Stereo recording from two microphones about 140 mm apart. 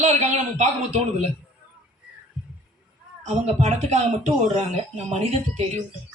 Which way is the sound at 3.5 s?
55° right (ahead or behind).